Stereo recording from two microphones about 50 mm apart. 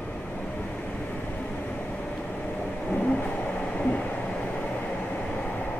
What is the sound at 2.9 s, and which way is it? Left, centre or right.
Train, left.